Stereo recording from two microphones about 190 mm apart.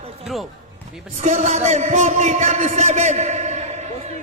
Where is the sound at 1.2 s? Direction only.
40° right (ahead or behind).